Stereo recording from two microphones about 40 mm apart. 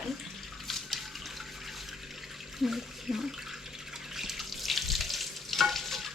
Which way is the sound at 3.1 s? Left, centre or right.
Centre.